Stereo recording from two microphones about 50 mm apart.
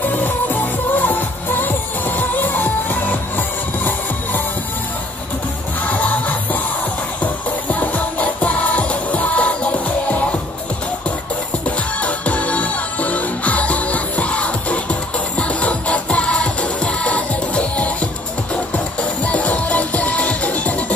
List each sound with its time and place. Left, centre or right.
0.0 s music: left
5.9 s music: left
7.7 s music: left
12.0 s music: left